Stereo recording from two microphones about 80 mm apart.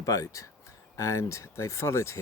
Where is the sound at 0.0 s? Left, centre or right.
Left.